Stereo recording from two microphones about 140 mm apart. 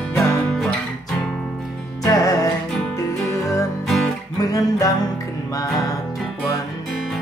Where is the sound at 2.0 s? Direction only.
25° left (ahead or behind).